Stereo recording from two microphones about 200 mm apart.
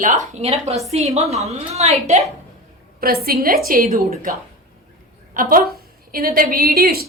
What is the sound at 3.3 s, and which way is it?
A woman's voice, 45° right (ahead or behind).